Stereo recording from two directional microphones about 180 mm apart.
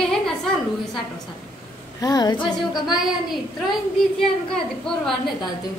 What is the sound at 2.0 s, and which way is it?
Speech, 20° left (ahead or behind).